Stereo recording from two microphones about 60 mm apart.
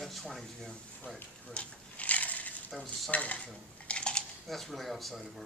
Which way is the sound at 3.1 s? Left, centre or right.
Left.